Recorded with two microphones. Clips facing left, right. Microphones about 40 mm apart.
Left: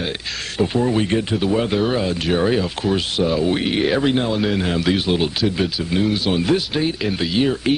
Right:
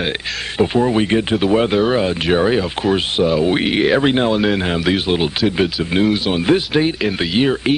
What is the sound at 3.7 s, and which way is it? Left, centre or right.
Speech, centre.